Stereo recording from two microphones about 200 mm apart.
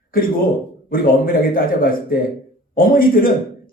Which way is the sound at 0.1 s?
45° left (ahead or behind).